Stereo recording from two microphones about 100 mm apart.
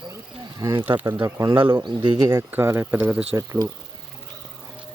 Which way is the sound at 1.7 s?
55° right (ahead or behind).